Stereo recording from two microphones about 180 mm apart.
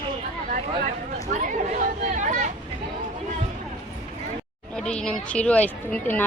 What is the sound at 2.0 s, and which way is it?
Speech, 45° right (ahead or behind).